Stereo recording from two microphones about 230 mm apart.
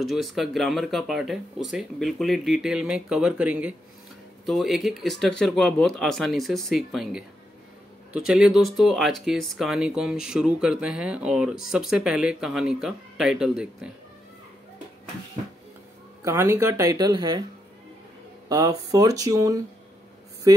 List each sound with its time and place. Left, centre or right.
0.0 s speech: centre
16.3 s speech: centre
18.5 s speech: centre